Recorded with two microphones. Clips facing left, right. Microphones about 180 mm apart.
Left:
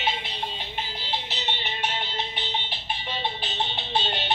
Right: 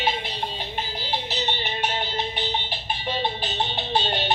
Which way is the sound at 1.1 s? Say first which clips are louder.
Right 4 dB; 40° right (ahead or behind).